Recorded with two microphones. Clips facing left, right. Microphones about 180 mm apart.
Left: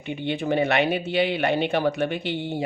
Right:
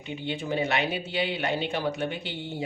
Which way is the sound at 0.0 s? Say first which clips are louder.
Left 6 dB; 60° left (ahead or behind).